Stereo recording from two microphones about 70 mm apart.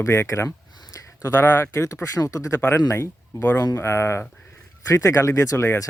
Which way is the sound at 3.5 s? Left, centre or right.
Left.